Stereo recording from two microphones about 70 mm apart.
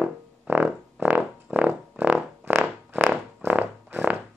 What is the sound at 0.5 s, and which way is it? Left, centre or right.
Music, right.